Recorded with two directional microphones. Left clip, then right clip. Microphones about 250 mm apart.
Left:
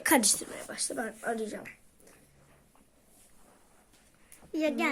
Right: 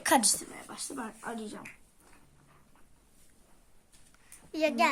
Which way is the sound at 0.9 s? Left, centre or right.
Centre.